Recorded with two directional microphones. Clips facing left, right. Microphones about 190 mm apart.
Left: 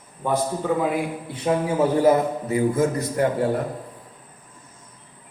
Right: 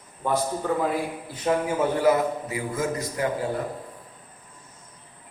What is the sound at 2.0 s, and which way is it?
A man's voice, 45° left (ahead or behind).